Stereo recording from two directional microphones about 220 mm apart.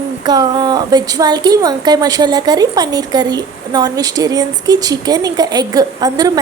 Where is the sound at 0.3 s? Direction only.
20° right (ahead or behind).